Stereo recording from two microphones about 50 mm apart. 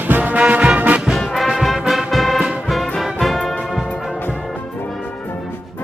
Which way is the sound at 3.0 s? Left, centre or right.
Centre.